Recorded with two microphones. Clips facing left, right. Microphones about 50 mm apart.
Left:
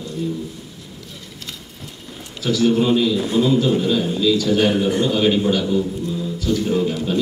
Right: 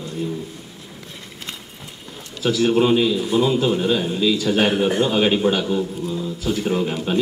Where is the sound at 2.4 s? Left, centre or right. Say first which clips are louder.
Even; right.